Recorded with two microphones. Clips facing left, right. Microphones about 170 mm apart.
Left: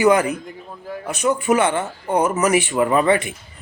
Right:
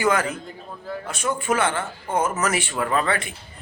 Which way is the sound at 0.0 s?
15° left (ahead or behind).